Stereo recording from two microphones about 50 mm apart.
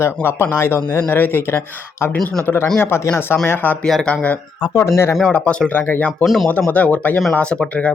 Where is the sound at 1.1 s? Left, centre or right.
Left.